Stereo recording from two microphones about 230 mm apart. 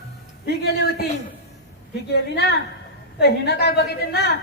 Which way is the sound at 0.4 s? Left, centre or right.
Left.